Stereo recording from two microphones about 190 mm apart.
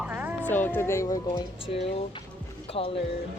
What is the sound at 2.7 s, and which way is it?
Speech, 30° left (ahead or behind).